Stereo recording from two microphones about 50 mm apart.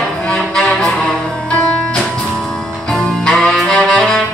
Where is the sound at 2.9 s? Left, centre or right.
Centre.